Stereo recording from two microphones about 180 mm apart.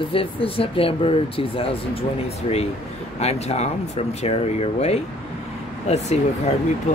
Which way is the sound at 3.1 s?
35° left (ahead or behind).